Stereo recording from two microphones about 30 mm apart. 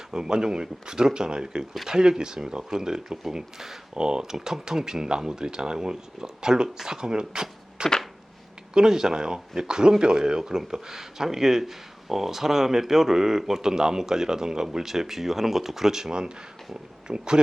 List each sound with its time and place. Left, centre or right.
0.1 s speech: right
3.9 s speech: right
7.8 s a sound: right
8.7 s speech: right